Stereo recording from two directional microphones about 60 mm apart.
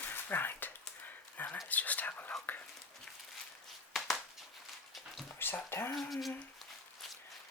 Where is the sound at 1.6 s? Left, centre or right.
Left.